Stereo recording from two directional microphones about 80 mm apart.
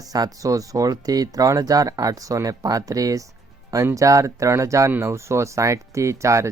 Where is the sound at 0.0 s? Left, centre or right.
Right.